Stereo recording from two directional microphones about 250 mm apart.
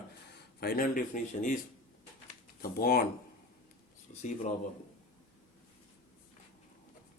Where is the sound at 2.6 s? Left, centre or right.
Left.